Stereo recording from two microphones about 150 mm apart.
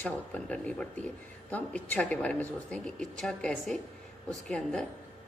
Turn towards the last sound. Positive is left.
turn(degrees=5)  # may be behind; listen again after turning